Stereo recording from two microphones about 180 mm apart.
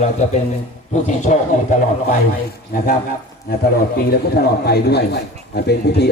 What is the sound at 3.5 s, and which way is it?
Speech, 55° left (ahead or behind).